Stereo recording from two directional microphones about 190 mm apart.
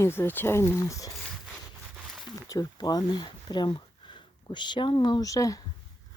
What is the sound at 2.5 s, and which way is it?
Speech, 20° left (ahead or behind).